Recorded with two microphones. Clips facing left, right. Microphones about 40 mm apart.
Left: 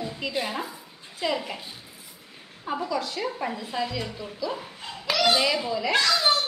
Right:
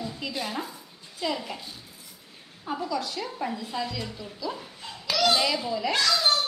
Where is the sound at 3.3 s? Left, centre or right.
Centre.